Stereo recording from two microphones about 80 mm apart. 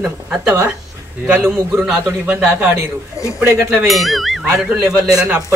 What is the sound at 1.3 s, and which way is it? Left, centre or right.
Speech, right.